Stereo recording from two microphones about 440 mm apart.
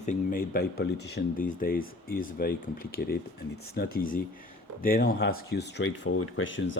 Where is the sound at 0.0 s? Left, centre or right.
Centre.